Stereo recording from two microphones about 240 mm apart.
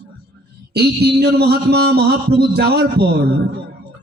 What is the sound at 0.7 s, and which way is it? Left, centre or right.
A man's voice, right.